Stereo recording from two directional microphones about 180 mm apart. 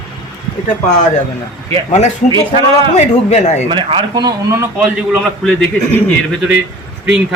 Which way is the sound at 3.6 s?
25° right (ahead or behind).